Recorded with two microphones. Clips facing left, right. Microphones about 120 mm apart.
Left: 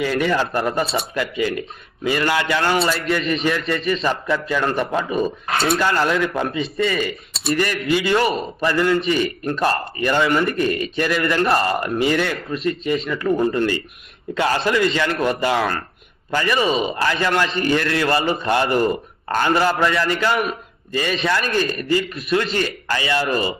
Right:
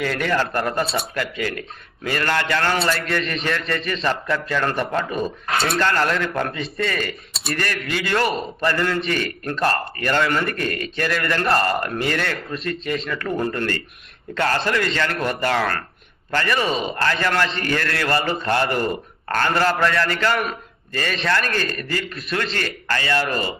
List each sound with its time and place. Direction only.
0.0 s speech: 10° left (ahead or behind)
1.1 s speech: 15° left (ahead or behind)
2.7 s a man's voice: centre (ahead or behind)